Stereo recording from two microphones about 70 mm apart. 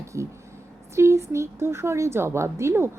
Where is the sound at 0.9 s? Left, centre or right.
Right.